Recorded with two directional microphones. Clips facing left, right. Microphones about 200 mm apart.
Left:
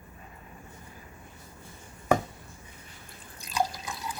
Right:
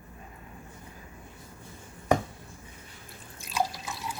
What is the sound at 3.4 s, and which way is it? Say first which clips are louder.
Drip: left 1 dB; centre (ahead or behind).